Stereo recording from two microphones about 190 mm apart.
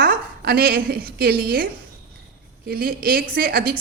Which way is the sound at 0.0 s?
55° right (ahead or behind).